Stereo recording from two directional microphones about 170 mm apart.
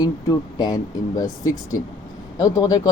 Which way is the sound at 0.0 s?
25° left (ahead or behind).